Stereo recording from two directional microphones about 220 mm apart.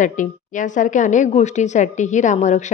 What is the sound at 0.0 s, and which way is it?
A woman's voice, 35° left (ahead or behind).